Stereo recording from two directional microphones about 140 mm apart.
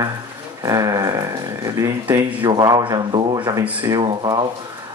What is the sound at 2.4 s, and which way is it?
A man's voice, 30° right (ahead or behind).